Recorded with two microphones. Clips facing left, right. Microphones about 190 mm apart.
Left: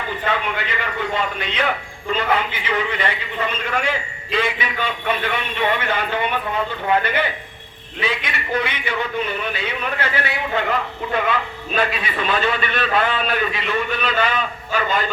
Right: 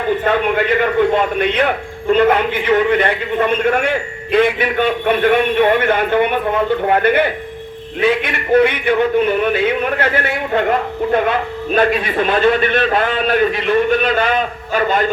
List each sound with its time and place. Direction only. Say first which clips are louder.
0.3 s a man's voice: right 7 dB; 55° right (ahead or behind)